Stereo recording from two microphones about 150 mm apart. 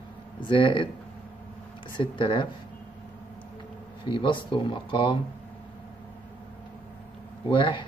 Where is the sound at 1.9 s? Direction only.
35° left (ahead or behind).